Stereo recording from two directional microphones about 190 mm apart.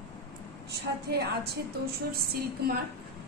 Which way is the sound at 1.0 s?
60° right (ahead or behind).